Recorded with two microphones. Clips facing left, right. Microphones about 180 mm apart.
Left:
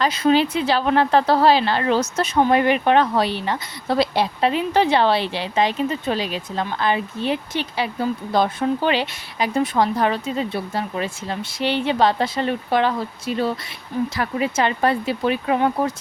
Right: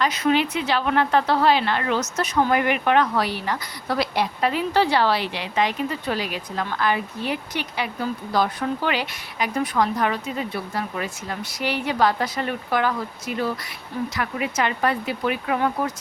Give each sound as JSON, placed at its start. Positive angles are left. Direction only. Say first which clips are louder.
{"t": 0.0, "sound": "speech", "louder": "left 3 dB", "side_deg": 30}